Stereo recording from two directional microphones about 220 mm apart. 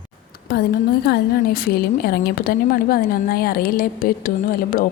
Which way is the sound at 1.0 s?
45° left (ahead or behind).